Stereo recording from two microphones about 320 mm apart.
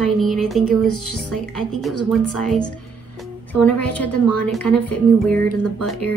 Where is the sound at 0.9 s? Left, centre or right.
Left.